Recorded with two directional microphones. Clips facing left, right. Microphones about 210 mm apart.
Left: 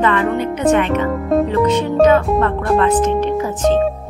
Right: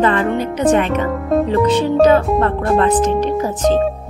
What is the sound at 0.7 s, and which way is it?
Speech, 35° right (ahead or behind).